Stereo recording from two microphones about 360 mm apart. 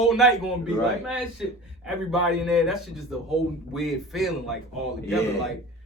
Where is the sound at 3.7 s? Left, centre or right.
Centre.